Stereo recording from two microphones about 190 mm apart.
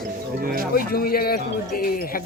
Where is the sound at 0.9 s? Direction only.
50° left (ahead or behind).